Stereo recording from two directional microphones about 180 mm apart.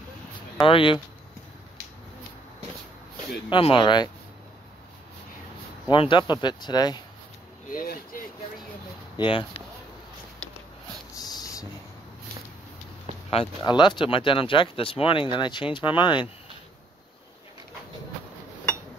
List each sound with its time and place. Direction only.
0.7 s speech: 30° left (ahead or behind)
3.4 s speech: 30° left (ahead or behind)
5.9 s speech: 25° left (ahead or behind)
7.7 s speech: 55° left (ahead or behind)
9.1 s speech: 25° left (ahead or behind)
11.1 s a sound: 20° left (ahead or behind)
13.3 s speech: 30° left (ahead or behind)